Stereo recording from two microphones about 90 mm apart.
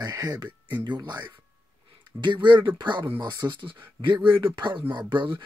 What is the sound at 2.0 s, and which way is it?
Speech, 60° right (ahead or behind).